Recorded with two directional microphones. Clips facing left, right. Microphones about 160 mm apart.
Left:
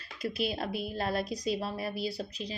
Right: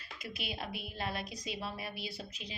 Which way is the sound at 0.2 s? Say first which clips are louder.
Left 10 dB; 40° left (ahead or behind).